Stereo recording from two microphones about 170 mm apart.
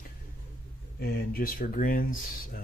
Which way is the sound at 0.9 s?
60° left (ahead or behind).